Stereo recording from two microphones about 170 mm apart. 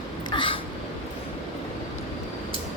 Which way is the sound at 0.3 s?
30° left (ahead or behind).